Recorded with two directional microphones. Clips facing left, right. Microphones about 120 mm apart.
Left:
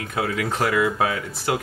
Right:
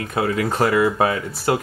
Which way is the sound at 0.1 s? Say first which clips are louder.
Right 4 dB; 35° right (ahead or behind).